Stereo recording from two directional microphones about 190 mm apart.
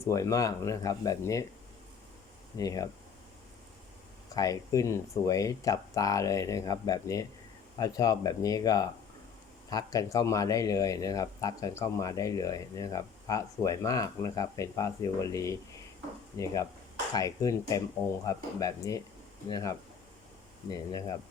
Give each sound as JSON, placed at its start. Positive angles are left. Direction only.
{"t": 0.0, "sound": "speech", "side_deg": 15}
{"t": 2.6, "sound": "speech", "side_deg": 20}
{"t": 4.4, "sound": "speech", "side_deg": 20}